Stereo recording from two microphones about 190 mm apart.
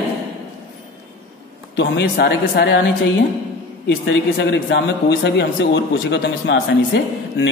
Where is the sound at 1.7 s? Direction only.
60° left (ahead or behind).